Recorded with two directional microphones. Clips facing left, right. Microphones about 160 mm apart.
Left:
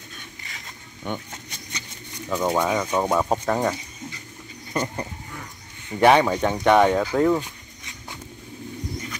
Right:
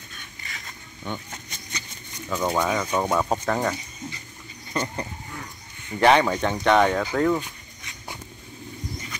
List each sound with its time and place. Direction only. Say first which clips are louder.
1.0 s a sound: left 2 dB; 15° left (ahead or behind)
2.2 s speech: left 2 dB; 10° left (ahead or behind)
5.9 s speech: left 2 dB; 10° left (ahead or behind)